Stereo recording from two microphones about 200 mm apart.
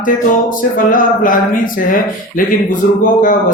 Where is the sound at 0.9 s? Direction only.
40° left (ahead or behind).